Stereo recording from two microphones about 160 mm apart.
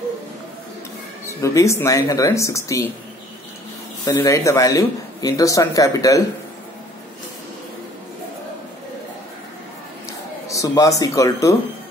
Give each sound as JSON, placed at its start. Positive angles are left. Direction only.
{"t": 1.2, "sound": "speech", "side_deg": 20}
{"t": 4.0, "sound": "speech", "side_deg": 20}
{"t": 10.0, "sound": "a sound", "side_deg": 20}